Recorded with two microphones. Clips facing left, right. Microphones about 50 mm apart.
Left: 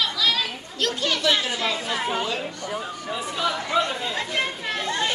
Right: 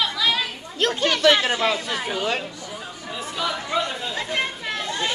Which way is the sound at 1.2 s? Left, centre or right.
Right.